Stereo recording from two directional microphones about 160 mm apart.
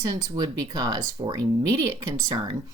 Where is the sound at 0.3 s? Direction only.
20° right (ahead or behind).